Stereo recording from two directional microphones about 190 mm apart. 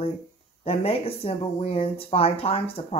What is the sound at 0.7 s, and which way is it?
Speech, 30° left (ahead or behind).